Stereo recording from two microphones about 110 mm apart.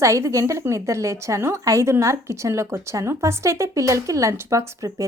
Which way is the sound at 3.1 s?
25° right (ahead or behind).